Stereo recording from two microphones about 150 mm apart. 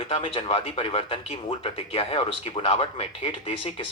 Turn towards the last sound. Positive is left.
turn(degrees=35)  # may be behind; listen again after turning